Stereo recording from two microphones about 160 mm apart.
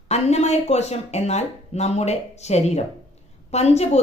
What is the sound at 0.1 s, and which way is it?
Speech, 45° left (ahead or behind).